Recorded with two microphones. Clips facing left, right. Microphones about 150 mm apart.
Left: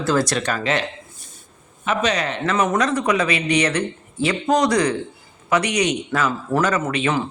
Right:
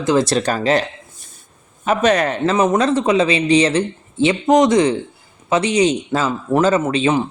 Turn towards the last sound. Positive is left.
turn(degrees=-25)  # may be behind; listen again after turning